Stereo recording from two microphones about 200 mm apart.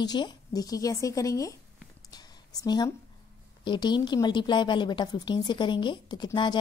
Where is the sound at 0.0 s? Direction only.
20° left (ahead or behind).